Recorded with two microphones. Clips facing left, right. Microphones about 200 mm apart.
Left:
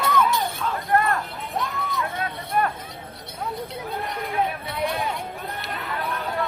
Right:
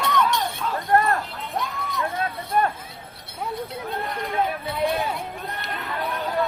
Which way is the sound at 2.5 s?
35° right (ahead or behind).